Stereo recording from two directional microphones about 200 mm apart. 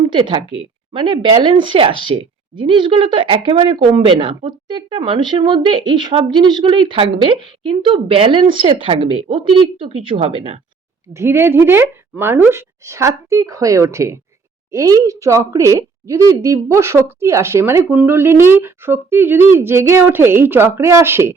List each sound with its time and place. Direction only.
0.0 s speech: 25° right (ahead or behind)
11.1 s speech: 15° right (ahead or behind)